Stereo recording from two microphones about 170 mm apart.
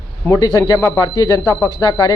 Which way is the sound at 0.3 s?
20° left (ahead or behind).